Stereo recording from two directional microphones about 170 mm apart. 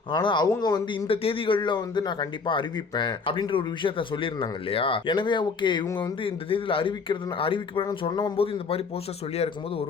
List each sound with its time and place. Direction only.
0.1 s speech: 25° left (ahead or behind)